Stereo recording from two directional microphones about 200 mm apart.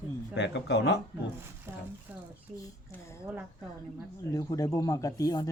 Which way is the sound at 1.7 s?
10° right (ahead or behind).